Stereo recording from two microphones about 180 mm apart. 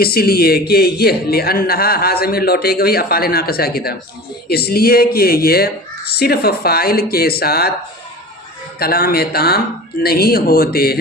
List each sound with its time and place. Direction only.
0.0 s a man's voice: 60° left (ahead or behind)
8.8 s a man's voice: 55° left (ahead or behind)